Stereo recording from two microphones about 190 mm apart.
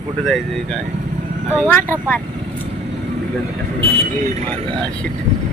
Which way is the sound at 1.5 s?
10° left (ahead or behind).